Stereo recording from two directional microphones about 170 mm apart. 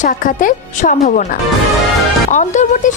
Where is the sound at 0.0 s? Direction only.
50° left (ahead or behind).